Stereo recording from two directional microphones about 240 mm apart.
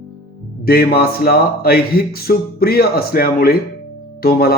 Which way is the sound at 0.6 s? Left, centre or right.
Left.